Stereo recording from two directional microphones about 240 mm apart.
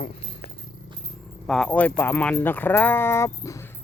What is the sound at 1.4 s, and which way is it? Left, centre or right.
Speech, centre.